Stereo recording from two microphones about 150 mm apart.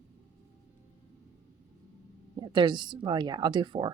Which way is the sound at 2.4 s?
30° right (ahead or behind).